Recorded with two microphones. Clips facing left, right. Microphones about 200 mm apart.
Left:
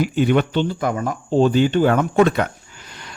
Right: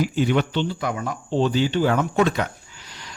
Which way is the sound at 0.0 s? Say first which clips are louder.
Left 3 dB; 55° left (ahead or behind).